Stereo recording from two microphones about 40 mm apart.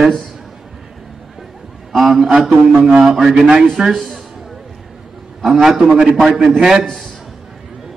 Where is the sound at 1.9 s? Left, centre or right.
Centre.